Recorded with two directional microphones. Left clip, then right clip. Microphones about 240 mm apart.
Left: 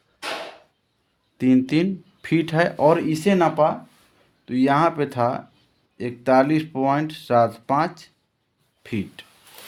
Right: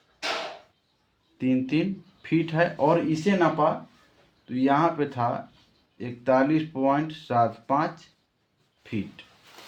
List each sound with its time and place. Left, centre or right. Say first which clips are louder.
1.4 s speech: left 6 dB; left